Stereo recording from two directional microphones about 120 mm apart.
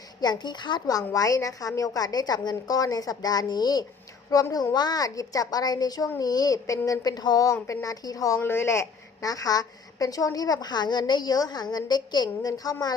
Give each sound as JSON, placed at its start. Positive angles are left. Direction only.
{"t": 0.2, "sound": "a woman's voice", "side_deg": 35}
{"t": 8.4, "sound": "a woman's voice", "side_deg": 20}